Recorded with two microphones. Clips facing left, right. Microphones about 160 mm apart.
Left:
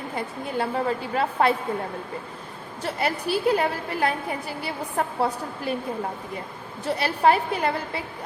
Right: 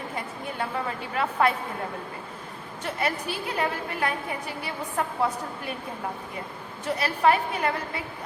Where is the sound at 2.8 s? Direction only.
30° left (ahead or behind).